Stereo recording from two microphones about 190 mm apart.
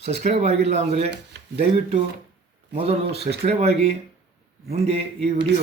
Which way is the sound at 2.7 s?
30° right (ahead or behind).